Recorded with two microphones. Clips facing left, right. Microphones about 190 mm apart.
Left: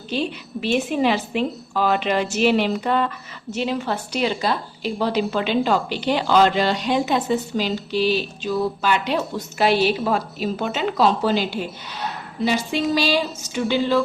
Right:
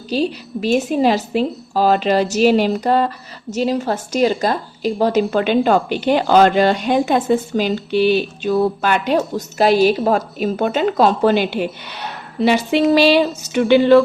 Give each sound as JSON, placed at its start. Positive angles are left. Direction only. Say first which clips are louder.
{"t": 0.1, "sound": "a woman's voice", "louder": "right 5 dB", "side_deg": -40}